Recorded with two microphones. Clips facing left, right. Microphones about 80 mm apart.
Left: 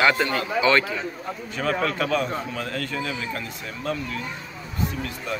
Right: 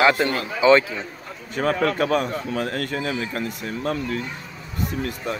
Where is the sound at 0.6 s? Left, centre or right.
Right.